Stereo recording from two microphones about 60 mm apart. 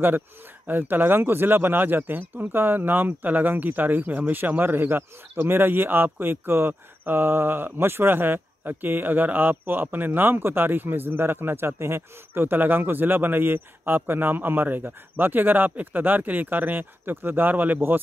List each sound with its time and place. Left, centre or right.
0.7 s speech: right